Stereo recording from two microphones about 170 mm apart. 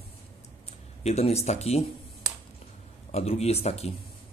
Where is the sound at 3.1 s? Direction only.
40° left (ahead or behind).